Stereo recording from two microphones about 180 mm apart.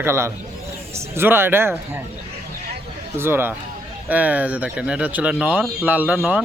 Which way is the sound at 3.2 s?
10° right (ahead or behind).